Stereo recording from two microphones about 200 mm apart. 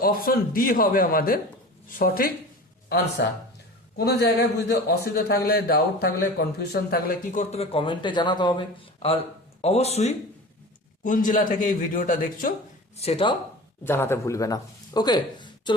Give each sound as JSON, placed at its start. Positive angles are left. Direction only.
{"t": 0.0, "sound": "a man's voice", "side_deg": 45}
{"t": 3.2, "sound": "a man's voice", "side_deg": 60}
{"t": 7.5, "sound": "a man's voice", "side_deg": 30}
{"t": 13.0, "sound": "speech", "side_deg": 30}
{"t": 13.8, "sound": "speech", "side_deg": 10}